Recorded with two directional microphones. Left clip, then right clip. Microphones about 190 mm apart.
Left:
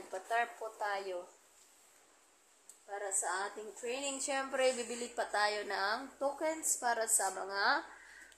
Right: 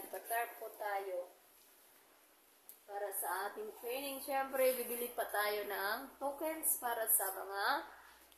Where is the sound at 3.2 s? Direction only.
35° left (ahead or behind).